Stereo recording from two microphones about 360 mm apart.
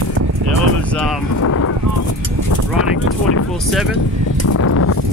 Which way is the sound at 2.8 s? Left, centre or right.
Left.